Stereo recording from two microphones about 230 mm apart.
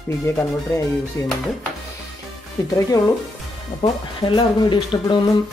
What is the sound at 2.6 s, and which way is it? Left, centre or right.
Speech, centre.